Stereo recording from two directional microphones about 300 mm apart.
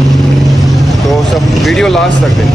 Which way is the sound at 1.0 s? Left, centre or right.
Centre.